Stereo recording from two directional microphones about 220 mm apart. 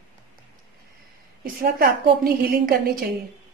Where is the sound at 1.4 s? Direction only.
40° right (ahead or behind).